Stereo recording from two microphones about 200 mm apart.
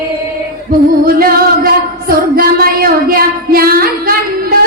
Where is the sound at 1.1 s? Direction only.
45° right (ahead or behind).